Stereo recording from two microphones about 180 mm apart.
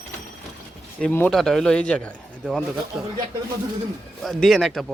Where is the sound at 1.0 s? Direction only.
10° left (ahead or behind).